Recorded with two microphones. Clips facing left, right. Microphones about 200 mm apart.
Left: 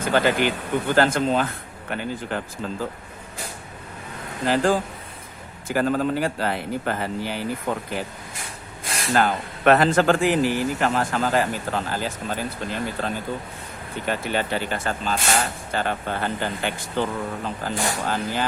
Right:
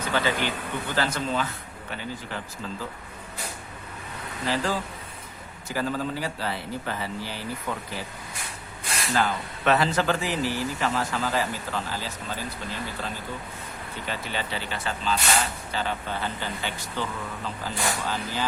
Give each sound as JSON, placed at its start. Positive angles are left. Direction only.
{"t": 0.0, "sound": "speech", "side_deg": 50}
{"t": 4.4, "sound": "speech", "side_deg": 50}